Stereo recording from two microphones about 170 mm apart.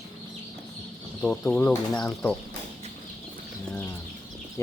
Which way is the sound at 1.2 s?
5° left (ahead or behind).